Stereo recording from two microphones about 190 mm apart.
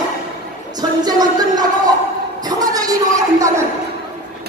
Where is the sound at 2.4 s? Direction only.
20° right (ahead or behind).